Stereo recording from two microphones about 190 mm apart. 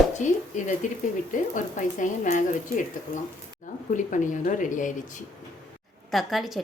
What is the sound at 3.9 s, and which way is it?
Speech, 40° left (ahead or behind).